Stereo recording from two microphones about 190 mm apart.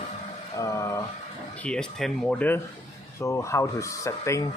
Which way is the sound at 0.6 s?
15° left (ahead or behind).